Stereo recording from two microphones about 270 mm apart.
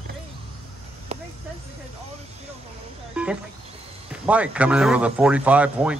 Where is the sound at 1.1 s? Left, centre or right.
Right.